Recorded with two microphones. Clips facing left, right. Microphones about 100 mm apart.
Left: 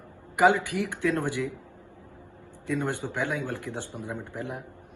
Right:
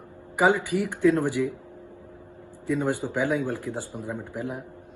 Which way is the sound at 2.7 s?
10° right (ahead or behind).